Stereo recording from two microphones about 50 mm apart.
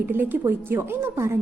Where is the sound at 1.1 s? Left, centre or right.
Right.